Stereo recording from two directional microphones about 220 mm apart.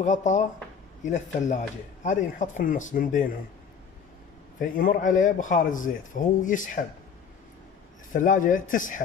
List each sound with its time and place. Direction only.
0.0 s a man's voice: 35° left (ahead or behind)
4.6 s a man's voice: 40° left (ahead or behind)
8.1 s a man's voice: 35° left (ahead or behind)